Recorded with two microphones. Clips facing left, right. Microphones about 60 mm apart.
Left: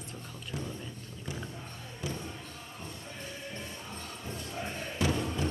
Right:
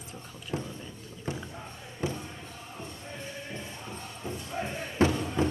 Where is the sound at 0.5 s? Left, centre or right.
Right.